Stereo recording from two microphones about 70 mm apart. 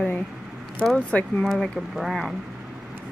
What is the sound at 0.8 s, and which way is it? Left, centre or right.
Speech, centre.